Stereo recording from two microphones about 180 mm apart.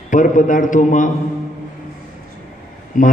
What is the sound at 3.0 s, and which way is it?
Speech, 45° left (ahead or behind).